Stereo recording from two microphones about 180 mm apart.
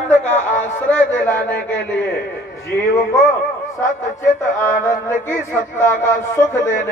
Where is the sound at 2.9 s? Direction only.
15° left (ahead or behind).